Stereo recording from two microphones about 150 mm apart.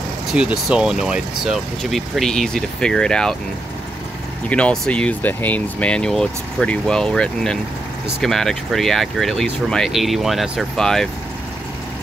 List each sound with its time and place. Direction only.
0.3 s speech: 5° right (ahead or behind)
4.5 s speech: 10° left (ahead or behind)